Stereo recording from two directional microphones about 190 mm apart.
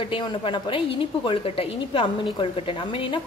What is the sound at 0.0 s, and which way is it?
A woman's voice, 30° left (ahead or behind).